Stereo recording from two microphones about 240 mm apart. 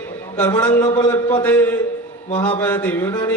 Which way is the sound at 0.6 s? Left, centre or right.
Centre.